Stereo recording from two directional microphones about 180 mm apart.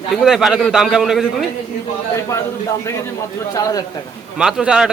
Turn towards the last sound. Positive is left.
turn(degrees=-5)  # may be behind; listen again after turning